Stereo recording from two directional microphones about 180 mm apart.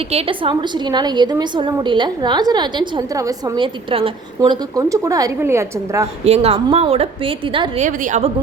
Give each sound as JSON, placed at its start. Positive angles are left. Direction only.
{"t": 0.0, "sound": "a woman's voice", "side_deg": -35}
{"t": 4.4, "sound": "a woman's voice", "side_deg": -20}
{"t": 6.2, "sound": "a woman's voice", "side_deg": -35}
{"t": 7.8, "sound": "a woman's voice", "side_deg": -45}